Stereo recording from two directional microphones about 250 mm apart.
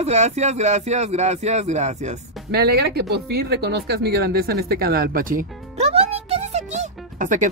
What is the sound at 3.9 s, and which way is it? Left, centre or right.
Music, right.